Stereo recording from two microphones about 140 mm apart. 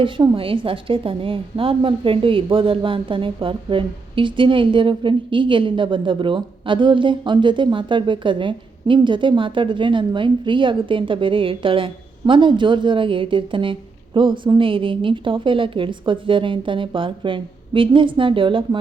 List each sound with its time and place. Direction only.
0.0 s a woman's voice: 40° right (ahead or behind)